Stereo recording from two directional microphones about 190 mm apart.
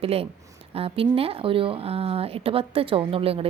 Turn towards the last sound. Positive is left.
turn(degrees=-30)  # may be behind; listen again after turning